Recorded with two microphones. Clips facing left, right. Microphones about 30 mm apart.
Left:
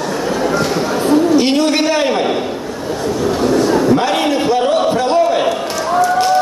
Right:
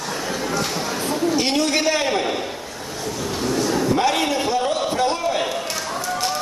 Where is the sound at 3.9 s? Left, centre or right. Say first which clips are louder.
Left 6 dB; centre.